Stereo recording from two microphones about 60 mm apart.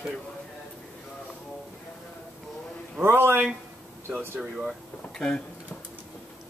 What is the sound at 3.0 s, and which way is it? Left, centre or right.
Speech, right.